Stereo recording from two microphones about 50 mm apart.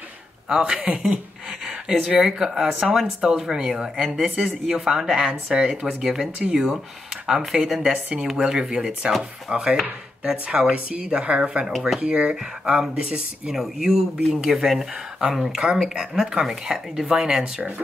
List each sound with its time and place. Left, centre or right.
0.5 s speech: centre
15.6 s speech: centre